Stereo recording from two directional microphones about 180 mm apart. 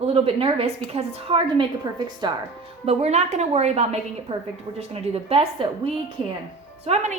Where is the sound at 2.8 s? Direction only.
40° right (ahead or behind).